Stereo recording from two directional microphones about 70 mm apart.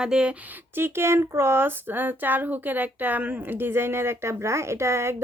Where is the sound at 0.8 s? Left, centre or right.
Right.